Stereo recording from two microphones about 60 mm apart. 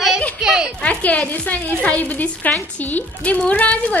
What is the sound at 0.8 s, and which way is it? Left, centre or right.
Speech, left.